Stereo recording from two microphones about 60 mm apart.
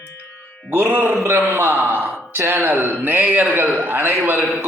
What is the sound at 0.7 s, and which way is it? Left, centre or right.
Speech, right.